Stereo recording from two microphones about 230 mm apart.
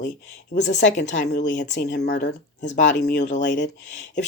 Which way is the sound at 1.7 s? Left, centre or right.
Left.